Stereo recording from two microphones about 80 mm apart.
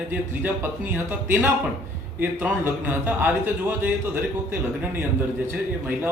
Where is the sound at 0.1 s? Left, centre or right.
Right.